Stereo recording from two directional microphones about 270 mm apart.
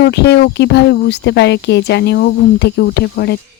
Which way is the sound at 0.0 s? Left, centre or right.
Left.